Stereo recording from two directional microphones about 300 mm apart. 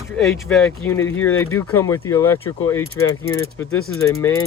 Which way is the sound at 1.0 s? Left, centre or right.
Left.